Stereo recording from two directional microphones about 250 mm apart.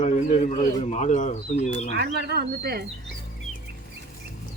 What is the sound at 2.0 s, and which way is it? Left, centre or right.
Speech, right.